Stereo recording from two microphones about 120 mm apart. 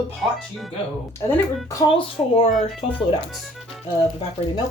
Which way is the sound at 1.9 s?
50° left (ahead or behind).